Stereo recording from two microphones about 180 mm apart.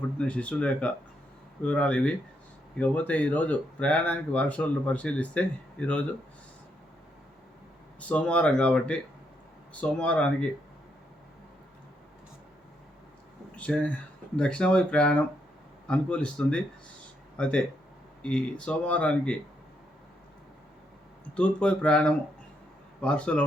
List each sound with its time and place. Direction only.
0.2 s speech: 5° left (ahead or behind)
7.9 s speech: 5° left (ahead or behind)
13.6 s speech: 5° left (ahead or behind)
21.3 s speech: 5° left (ahead or behind)